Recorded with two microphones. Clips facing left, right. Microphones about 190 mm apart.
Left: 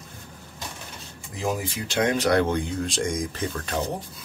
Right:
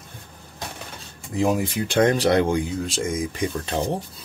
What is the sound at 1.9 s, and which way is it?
Speech, 50° right (ahead or behind).